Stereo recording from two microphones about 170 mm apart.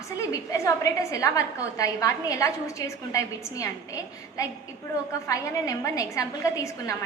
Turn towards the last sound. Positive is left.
turn(degrees=20)  # may be behind; listen again after turning